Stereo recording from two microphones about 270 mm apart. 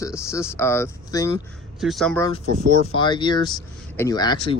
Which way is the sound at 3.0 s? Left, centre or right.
Centre.